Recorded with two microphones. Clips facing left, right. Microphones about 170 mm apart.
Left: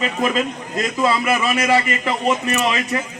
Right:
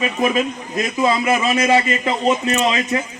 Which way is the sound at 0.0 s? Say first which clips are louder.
Right 2 dB; 15° right (ahead or behind).